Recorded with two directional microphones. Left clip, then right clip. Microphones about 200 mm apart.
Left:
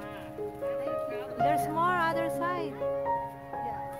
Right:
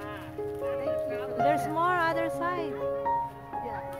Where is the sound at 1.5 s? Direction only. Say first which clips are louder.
Right 1 dB; 15° left (ahead or behind).